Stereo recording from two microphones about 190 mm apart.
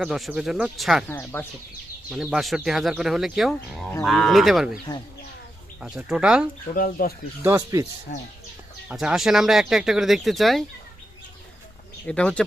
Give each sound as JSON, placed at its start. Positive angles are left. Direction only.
{"t": 0.0, "sound": "speech", "side_deg": -5}
{"t": 1.0, "sound": "speech", "side_deg": 10}
{"t": 2.0, "sound": "speech", "side_deg": -5}
{"t": 5.8, "sound": "speech", "side_deg": -5}
{"t": 6.7, "sound": "speech", "side_deg": 50}
{"t": 7.4, "sound": "speech", "side_deg": -15}
{"t": 8.1, "sound": "speech", "side_deg": 50}
{"t": 8.9, "sound": "speech", "side_deg": -5}
{"t": 12.0, "sound": "speech", "side_deg": 5}